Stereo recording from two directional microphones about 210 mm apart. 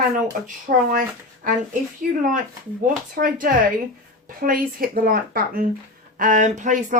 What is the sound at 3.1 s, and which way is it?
Speech, 40° right (ahead or behind).